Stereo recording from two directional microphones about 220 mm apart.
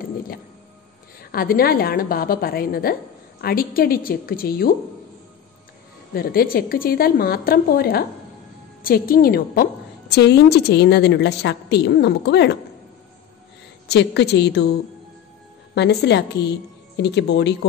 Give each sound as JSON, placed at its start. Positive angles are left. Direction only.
{"t": 1.3, "sound": "a woman's voice", "side_deg": 40}
{"t": 6.1, "sound": "a woman's voice", "side_deg": 40}
{"t": 13.8, "sound": "a woman's voice", "side_deg": 50}
{"t": 15.7, "sound": "a woman's voice", "side_deg": 50}